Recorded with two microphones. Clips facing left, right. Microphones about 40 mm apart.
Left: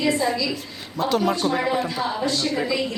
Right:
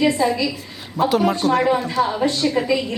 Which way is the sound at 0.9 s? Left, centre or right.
Centre.